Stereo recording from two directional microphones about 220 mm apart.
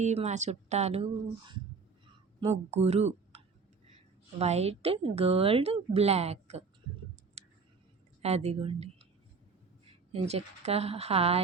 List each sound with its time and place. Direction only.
0.0 s a woman's voice: 30° right (ahead or behind)
7.4 s a sound: 30° right (ahead or behind)
8.2 s a woman's voice: 30° right (ahead or behind)